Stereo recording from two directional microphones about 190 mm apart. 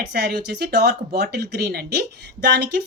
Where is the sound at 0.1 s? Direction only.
60° right (ahead or behind).